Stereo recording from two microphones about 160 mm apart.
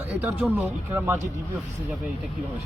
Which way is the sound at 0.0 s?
10° right (ahead or behind).